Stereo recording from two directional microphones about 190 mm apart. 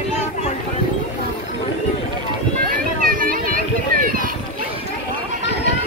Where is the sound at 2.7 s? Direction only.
50° right (ahead or behind).